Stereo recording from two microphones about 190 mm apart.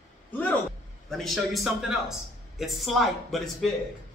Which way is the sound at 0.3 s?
10° left (ahead or behind).